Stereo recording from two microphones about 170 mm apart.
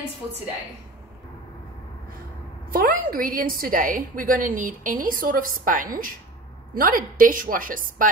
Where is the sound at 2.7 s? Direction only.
55° right (ahead or behind).